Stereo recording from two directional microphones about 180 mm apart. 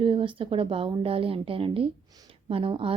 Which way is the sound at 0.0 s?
30° right (ahead or behind).